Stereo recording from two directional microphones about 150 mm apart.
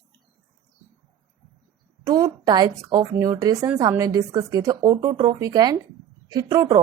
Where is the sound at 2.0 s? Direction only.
25° right (ahead or behind).